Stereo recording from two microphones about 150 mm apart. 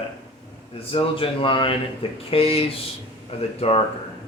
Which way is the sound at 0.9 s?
35° left (ahead or behind).